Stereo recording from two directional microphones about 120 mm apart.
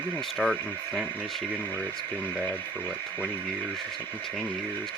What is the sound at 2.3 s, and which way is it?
Speech, 15° left (ahead or behind).